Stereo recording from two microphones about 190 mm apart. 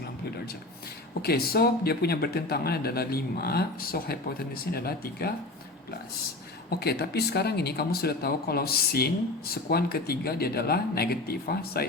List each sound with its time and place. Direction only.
1.2 s speech: 55° left (ahead or behind)
6.7 s speech: 55° left (ahead or behind)